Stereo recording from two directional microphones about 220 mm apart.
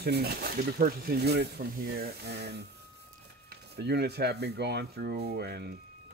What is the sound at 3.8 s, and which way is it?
Speech, 50° right (ahead or behind).